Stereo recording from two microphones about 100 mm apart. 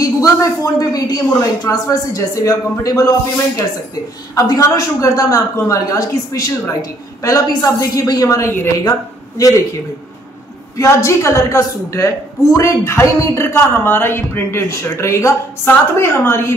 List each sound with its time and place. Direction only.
0.0 s a woman's voice: 35° left (ahead or behind)
4.4 s a woman's voice: 35° left (ahead or behind)
10.8 s a woman's voice: 30° left (ahead or behind)